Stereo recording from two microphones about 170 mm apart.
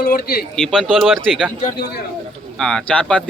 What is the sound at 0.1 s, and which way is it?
Speech, 60° left (ahead or behind).